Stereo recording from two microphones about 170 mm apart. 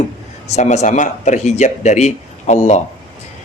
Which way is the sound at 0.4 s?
40° left (ahead or behind).